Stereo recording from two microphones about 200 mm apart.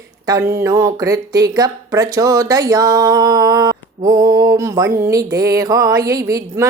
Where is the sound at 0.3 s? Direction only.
15° right (ahead or behind).